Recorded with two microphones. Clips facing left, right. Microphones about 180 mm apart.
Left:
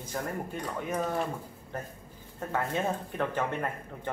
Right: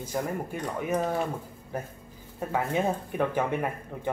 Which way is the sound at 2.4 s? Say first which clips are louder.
Right 3 dB; 10° right (ahead or behind).